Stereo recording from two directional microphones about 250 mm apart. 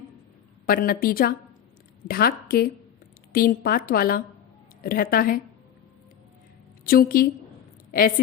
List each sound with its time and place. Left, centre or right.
0.6 s a woman's voice: left
6.8 s a woman's voice: left